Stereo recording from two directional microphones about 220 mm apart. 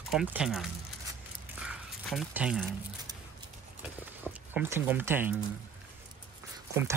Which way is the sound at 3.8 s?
5° right (ahead or behind).